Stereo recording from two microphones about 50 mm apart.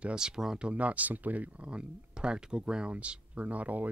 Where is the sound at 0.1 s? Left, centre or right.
Centre; by 1.7 s right.